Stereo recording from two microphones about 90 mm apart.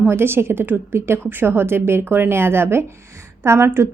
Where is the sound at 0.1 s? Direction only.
25° right (ahead or behind).